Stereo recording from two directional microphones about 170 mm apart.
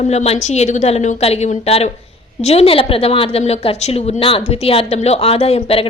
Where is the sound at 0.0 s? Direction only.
40° left (ahead or behind).